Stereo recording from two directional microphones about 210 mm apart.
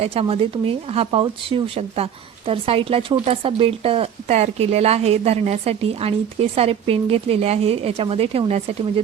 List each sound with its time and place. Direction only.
0.0 s speech: 30° right (ahead or behind)